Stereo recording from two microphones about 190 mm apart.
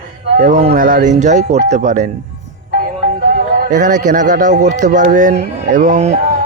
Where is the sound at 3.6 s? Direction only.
40° right (ahead or behind).